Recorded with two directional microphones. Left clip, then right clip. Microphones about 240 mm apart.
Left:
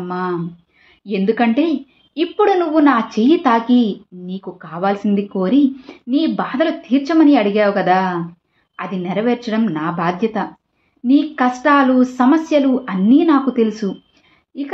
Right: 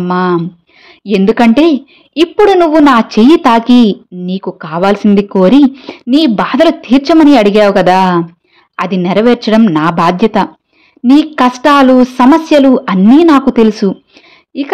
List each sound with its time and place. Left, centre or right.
0.0 s a woman's voice: right